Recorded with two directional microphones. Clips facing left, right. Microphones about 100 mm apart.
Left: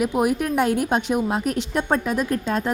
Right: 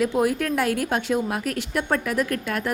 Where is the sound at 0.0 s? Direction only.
20° left (ahead or behind).